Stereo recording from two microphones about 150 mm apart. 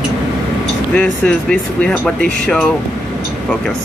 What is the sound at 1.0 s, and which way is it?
Speech, 5° left (ahead or behind).